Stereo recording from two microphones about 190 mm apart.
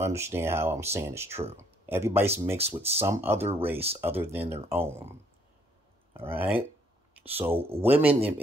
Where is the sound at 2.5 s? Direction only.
30° right (ahead or behind).